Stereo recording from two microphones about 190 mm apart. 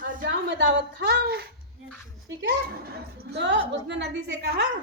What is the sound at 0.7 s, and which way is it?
A woman's voice, 65° right (ahead or behind).